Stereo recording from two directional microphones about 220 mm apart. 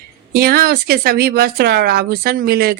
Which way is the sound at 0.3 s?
45° right (ahead or behind).